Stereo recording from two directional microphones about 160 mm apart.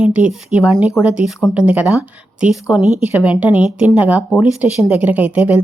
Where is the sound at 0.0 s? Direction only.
5° right (ahead or behind).